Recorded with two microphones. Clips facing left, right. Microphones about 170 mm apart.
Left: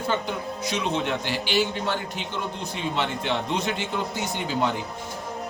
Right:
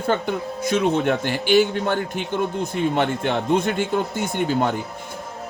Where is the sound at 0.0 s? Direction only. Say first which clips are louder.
Right 5 dB; 55° right (ahead or behind).